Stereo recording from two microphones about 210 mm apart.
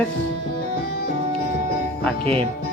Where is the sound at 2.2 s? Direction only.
25° right (ahead or behind).